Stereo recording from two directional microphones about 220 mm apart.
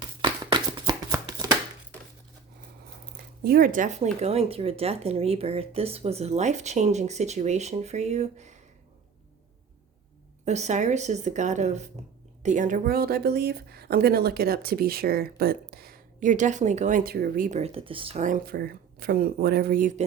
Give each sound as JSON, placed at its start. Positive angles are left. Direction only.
{"t": 0.2, "sound": "shuffling cards", "side_deg": -20}
{"t": 3.4, "sound": "speech", "side_deg": -40}
{"t": 10.4, "sound": "a woman's voice", "side_deg": -30}